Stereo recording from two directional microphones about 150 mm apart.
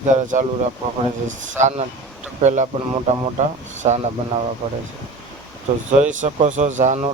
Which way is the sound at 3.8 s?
40° right (ahead or behind).